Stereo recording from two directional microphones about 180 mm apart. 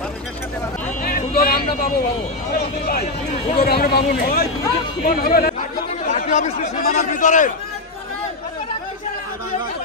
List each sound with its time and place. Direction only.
1.0 s a sound: 55° left (ahead or behind)
3.5 s speech: 60° left (ahead or behind)
6.0 s speech: 45° left (ahead or behind)